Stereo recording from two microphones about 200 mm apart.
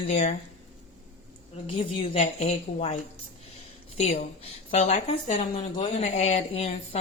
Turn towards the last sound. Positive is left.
turn(degrees=30)  # may be behind; listen again after turning